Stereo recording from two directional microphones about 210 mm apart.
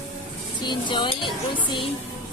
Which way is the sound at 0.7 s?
20° left (ahead or behind).